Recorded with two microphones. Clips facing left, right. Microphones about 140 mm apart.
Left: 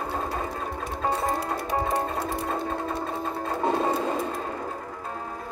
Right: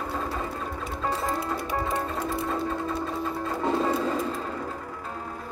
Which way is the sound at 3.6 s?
25° left (ahead or behind).